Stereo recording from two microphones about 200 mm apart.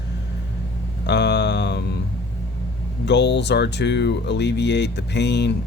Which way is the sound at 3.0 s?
60° left (ahead or behind).